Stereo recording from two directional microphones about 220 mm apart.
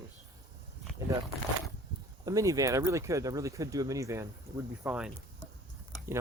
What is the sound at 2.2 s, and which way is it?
Speech, 15° right (ahead or behind).